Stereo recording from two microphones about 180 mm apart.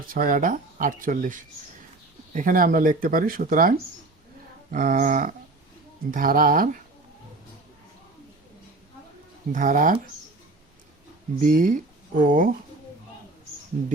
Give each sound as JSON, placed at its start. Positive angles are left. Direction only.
{"t": 0.1, "sound": "speech", "side_deg": -50}
{"t": 9.5, "sound": "speech", "side_deg": -50}
{"t": 11.3, "sound": "speech", "side_deg": -50}